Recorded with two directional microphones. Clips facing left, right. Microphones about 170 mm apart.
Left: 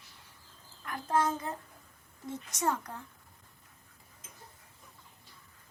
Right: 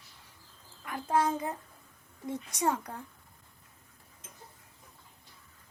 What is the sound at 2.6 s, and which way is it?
Speech, 15° right (ahead or behind).